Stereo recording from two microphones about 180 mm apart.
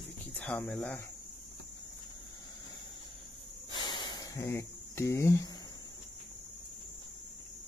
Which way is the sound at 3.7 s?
25° left (ahead or behind).